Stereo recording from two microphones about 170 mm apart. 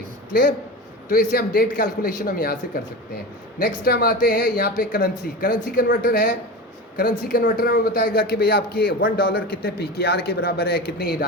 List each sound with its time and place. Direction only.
1.1 s a man's voice: 65° left (ahead or behind)